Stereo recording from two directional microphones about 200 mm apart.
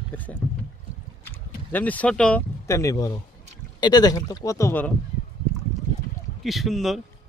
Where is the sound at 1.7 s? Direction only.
10° left (ahead or behind).